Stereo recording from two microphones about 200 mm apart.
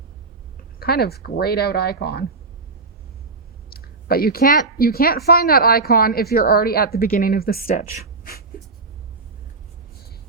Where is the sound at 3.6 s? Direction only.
50° left (ahead or behind).